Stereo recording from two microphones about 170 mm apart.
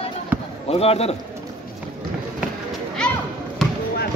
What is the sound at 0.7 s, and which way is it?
Speech, 35° left (ahead or behind).